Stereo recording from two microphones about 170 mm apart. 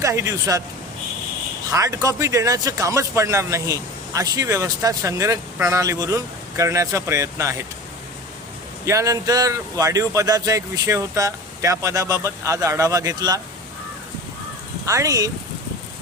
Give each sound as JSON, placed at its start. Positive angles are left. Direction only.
{"t": 0.0, "sound": "speech", "side_deg": -20}
{"t": 1.7, "sound": "speech", "side_deg": -20}
{"t": 8.9, "sound": "speech", "side_deg": -20}
{"t": 14.8, "sound": "speech", "side_deg": -20}